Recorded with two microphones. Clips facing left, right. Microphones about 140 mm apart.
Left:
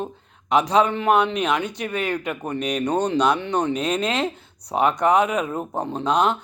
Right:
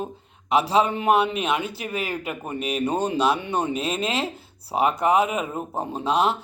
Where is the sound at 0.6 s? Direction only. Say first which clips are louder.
Left 2 dB; 30° right (ahead or behind).